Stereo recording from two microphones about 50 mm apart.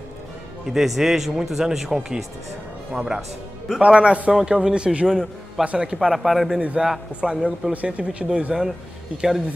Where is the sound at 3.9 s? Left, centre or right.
Right.